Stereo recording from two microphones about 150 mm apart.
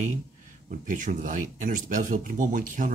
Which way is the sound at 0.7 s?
60° right (ahead or behind).